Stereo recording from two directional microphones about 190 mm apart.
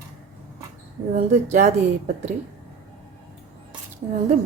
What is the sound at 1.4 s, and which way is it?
Speech, 35° right (ahead or behind).